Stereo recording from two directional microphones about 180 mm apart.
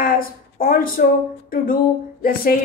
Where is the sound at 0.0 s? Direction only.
55° left (ahead or behind).